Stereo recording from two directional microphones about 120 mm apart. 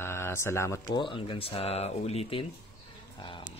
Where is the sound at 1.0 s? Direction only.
45° left (ahead or behind).